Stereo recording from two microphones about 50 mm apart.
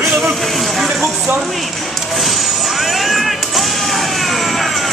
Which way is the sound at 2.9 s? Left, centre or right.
Centre.